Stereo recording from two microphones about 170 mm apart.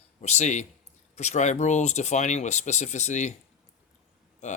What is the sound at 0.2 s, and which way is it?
Speech, 40° left (ahead or behind).